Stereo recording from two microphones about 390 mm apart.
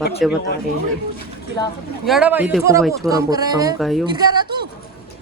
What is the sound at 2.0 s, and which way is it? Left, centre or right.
Speech, centre.